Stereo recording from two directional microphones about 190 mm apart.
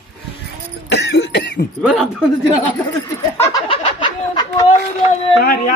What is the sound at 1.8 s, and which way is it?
Speech, centre (ahead or behind).